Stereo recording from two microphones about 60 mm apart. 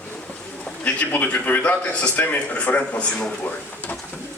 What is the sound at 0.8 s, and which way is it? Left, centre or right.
A man's voice, left.